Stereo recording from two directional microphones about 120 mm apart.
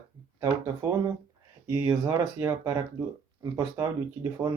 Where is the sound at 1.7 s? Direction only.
25° right (ahead or behind).